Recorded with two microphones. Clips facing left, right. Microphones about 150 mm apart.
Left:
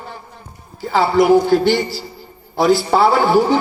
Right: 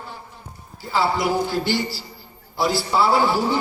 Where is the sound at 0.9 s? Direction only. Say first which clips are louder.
Left 9 dB; 55° left (ahead or behind).